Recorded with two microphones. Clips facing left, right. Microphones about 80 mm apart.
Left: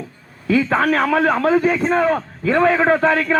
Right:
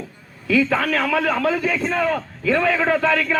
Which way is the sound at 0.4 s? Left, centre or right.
Left.